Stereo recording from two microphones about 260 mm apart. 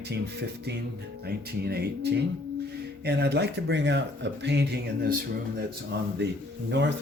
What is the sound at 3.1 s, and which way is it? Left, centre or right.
Speech, right.